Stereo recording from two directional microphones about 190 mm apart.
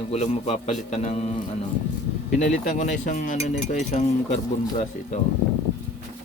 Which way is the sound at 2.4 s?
40° left (ahead or behind).